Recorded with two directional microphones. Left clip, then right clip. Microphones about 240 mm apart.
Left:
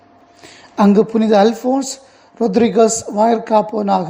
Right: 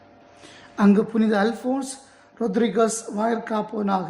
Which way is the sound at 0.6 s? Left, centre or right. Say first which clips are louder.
Left 8 dB; left.